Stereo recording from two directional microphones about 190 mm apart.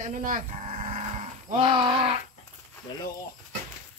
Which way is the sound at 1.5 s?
25° right (ahead or behind).